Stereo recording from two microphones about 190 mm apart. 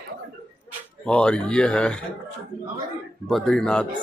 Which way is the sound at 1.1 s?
5° left (ahead or behind).